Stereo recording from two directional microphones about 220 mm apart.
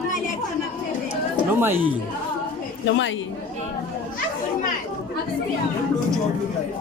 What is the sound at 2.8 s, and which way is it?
Speech, 60° left (ahead or behind).